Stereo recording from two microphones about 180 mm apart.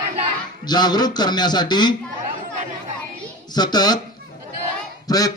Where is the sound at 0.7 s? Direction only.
20° left (ahead or behind).